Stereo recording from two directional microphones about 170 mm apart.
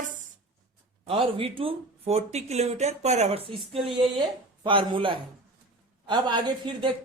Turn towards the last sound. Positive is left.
turn(degrees=-30)  # may be behind; listen again after turning